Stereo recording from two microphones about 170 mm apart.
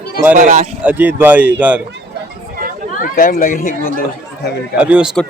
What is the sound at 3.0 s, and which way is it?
Speech, 55° left (ahead or behind).